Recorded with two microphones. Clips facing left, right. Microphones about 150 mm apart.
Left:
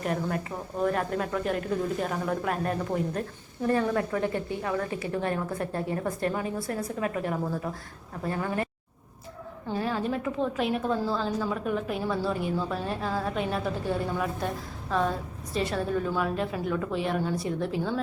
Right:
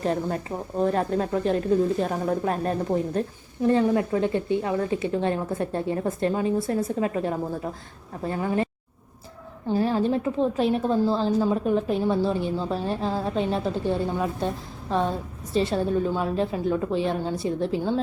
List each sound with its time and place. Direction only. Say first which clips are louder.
0.0 s a woman's voice: right 4 dB; 30° right (ahead or behind)
9.7 s a woman's voice: right 6 dB; 30° right (ahead or behind)